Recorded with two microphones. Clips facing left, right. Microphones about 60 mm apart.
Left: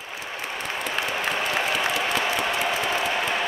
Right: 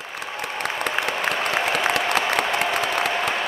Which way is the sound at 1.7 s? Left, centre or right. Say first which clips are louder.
Right 3 dB; right.